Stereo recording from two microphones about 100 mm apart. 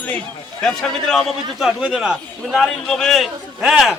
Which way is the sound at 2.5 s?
5° left (ahead or behind).